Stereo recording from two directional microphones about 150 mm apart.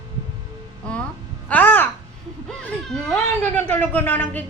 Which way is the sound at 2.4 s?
5° left (ahead or behind).